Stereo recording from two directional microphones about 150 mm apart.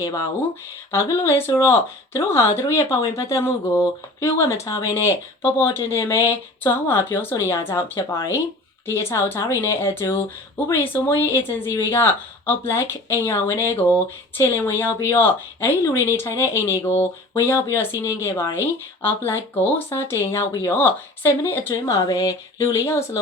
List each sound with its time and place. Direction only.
0.0 s speech: 20° left (ahead or behind)